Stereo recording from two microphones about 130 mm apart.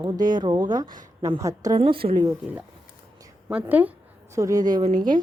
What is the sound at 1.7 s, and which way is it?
Speech, 45° right (ahead or behind).